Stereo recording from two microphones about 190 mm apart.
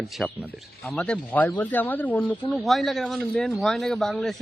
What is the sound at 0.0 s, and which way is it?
Speech, centre (ahead or behind).